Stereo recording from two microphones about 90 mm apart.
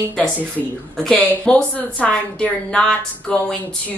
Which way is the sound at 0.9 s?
10° left (ahead or behind).